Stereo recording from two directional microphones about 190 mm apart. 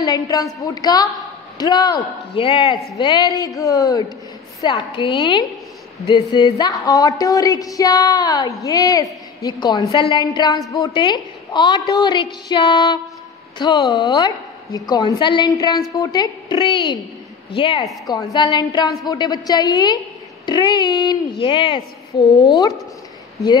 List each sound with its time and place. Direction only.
0.0 s a woman's voice: 20° left (ahead or behind)